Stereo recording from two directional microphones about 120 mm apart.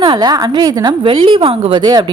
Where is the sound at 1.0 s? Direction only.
45° right (ahead or behind).